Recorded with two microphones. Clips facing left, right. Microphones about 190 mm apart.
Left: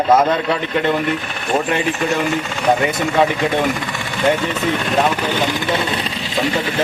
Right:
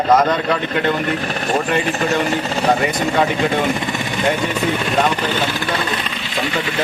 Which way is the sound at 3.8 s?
20° right (ahead or behind).